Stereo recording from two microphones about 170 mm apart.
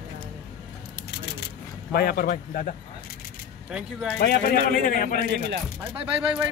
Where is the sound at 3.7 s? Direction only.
5° right (ahead or behind).